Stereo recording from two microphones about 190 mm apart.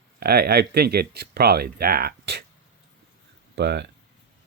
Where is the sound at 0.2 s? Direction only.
55° right (ahead or behind).